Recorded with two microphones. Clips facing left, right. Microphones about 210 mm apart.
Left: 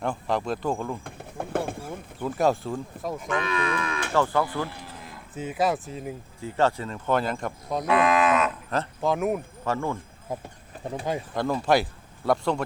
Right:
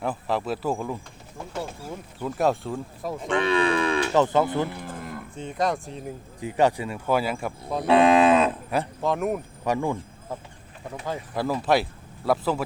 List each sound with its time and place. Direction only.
0.0 s speech: 5° right (ahead or behind)
1.0 s a sound: 55° left (ahead or behind)
2.2 s speech: centre (ahead or behind)
3.2 s speech: 30° right (ahead or behind)
4.1 s speech: 20° right (ahead or behind)
4.8 s cattle: 50° right (ahead or behind)
5.3 s speech: 5° left (ahead or behind)
6.4 s speech: 15° right (ahead or behind)
7.9 s speech: 30° right (ahead or behind)
9.0 s speech: centre (ahead or behind)
9.6 s speech: 15° right (ahead or behind)
11.3 s speech: 5° right (ahead or behind)